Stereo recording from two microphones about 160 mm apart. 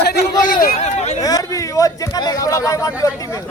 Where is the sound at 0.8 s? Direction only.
45° left (ahead or behind).